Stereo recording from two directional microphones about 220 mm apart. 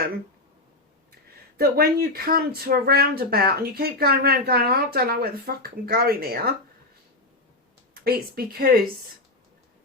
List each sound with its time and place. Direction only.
1.5 s speech: 45° right (ahead or behind)
7.9 s speech: 45° right (ahead or behind)